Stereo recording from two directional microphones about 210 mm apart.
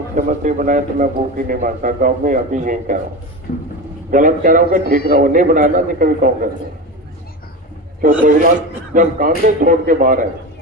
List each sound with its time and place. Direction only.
0.2 s a man's voice: 40° right (ahead or behind)
3.5 s a man's voice: 40° left (ahead or behind)
4.1 s a man's voice: 40° right (ahead or behind)
8.0 s a man's voice: 40° right (ahead or behind)